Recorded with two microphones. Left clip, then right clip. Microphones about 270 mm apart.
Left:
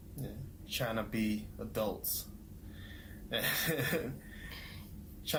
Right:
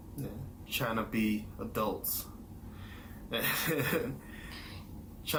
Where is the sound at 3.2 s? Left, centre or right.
Left.